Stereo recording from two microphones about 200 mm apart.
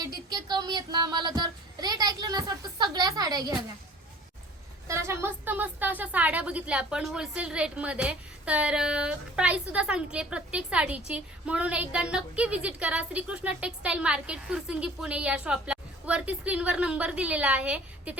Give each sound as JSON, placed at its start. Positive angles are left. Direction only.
{"t": 0.0, "sound": "child singing", "side_deg": -20}
{"t": 4.9, "sound": "a woman's voice", "side_deg": -15}